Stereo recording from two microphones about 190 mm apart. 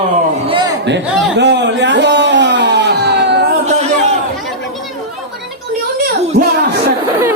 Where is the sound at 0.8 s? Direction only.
65° right (ahead or behind).